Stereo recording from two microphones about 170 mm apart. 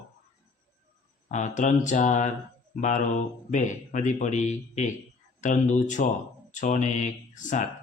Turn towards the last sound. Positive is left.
turn(degrees=45)  # may be behind; listen again after turning